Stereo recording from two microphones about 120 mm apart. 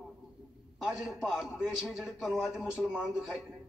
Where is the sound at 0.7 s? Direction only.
5° right (ahead or behind).